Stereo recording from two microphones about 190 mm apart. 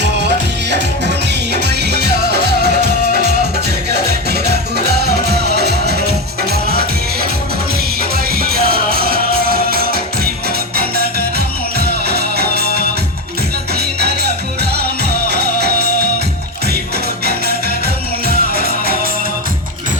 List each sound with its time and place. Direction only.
0.0 s music: 65° right (ahead or behind)
3.8 s music: 60° right (ahead or behind)
8.1 s music: 50° right (ahead or behind)
18.3 s music: 50° right (ahead or behind)